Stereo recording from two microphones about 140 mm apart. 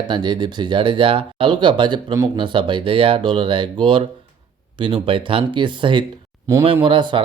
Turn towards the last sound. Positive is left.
turn(degrees=-35)  # may be behind; listen again after turning